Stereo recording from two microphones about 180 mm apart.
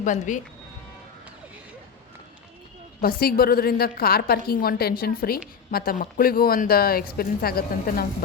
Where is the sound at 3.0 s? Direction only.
55° left (ahead or behind).